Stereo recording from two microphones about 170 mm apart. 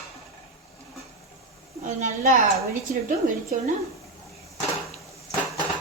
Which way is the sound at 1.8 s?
45° right (ahead or behind).